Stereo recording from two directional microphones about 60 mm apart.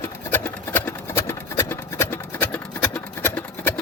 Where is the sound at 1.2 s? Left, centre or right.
Left.